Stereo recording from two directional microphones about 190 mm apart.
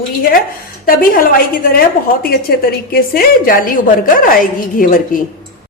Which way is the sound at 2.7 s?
50° left (ahead or behind).